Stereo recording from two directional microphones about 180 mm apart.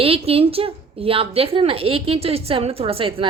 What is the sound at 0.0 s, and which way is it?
A woman's voice, 30° right (ahead or behind).